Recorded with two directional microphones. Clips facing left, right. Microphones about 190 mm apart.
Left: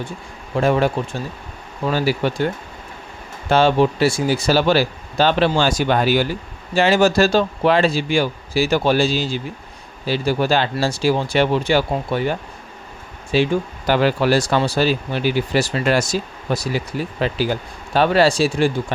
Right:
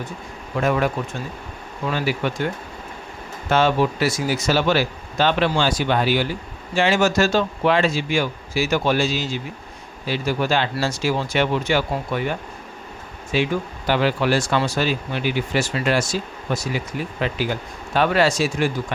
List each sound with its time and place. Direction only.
0.5 s speech: 30° left (ahead or behind)
3.5 s speech: 30° left (ahead or behind)